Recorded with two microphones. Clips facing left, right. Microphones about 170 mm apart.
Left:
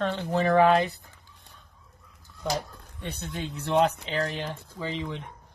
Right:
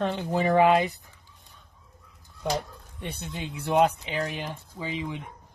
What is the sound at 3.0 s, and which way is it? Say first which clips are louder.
A woman's voice: left 1 dB; 15° right (ahead or behind).